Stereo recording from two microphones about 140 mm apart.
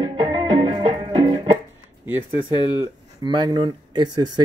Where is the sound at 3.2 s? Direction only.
30° right (ahead or behind).